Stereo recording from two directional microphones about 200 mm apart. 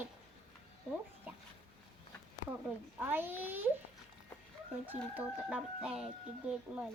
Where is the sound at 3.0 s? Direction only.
10° right (ahead or behind).